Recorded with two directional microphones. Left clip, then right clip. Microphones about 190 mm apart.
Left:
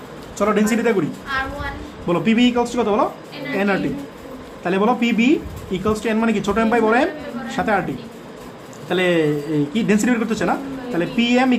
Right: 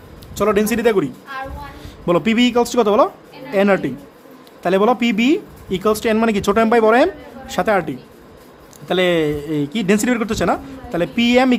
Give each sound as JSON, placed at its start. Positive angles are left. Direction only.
{"t": 0.3, "sound": "a man's voice", "side_deg": -50}
{"t": 2.0, "sound": "speech", "side_deg": -55}